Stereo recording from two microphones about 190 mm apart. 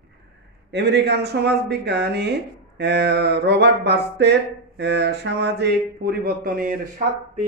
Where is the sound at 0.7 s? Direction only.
60° right (ahead or behind).